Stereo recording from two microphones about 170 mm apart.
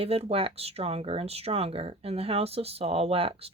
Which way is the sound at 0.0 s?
35° right (ahead or behind).